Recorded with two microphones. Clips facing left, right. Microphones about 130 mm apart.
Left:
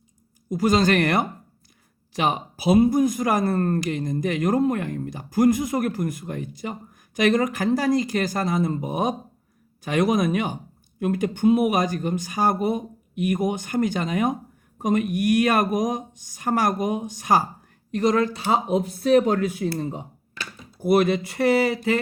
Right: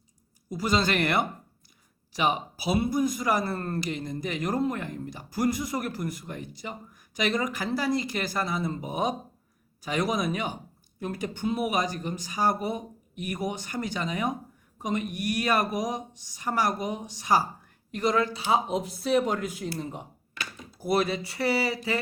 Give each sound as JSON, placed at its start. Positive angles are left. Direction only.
{"t": 0.5, "sound": "speech", "side_deg": 45}
{"t": 20.7, "sound": "speech", "side_deg": 55}